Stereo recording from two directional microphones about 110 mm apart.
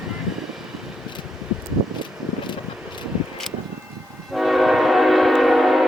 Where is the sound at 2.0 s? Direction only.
45° left (ahead or behind).